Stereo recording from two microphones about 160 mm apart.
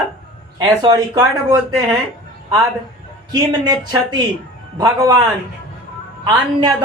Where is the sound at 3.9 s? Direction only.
25° right (ahead or behind).